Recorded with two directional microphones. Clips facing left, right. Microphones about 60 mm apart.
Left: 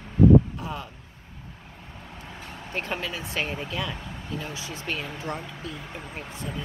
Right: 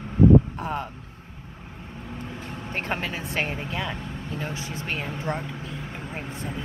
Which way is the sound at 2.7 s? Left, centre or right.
Right.